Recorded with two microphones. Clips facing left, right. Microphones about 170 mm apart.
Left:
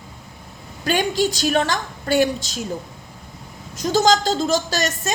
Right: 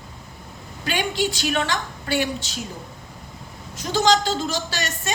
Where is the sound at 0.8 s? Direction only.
45° left (ahead or behind).